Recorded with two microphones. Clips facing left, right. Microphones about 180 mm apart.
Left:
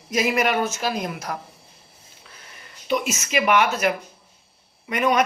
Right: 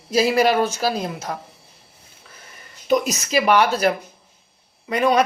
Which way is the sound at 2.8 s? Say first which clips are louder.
Right 5 dB; 40° right (ahead or behind).